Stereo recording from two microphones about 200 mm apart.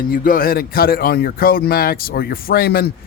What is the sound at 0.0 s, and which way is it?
Speech, 45° left (ahead or behind).